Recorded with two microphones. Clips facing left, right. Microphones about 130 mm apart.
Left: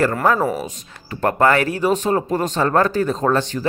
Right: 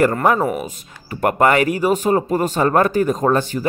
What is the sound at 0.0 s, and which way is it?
Speech, 15° right (ahead or behind).